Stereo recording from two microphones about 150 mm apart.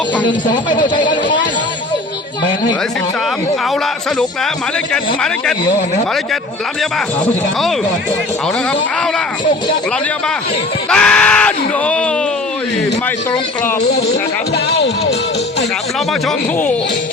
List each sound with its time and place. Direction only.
0.3 s a man's voice: 30° left (ahead or behind)
10.8 s speech: 5° left (ahead or behind)